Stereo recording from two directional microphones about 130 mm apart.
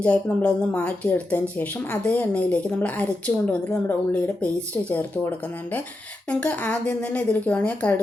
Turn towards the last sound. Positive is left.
turn(degrees=10)  # may be behind; listen again after turning